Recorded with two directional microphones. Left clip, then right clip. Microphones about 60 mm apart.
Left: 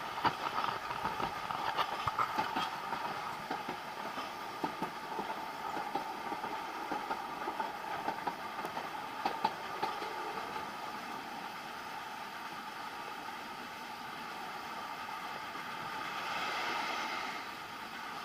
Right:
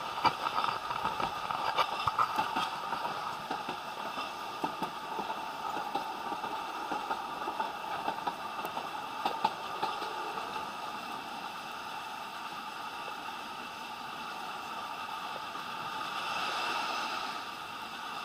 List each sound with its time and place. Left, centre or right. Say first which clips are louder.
0.2 s vehicle: right 4 dB; right
6.9 s vehicle: right 2 dB; centre
9.4 s a sound: right 3 dB; right
16.3 s vehicle: right 2 dB; right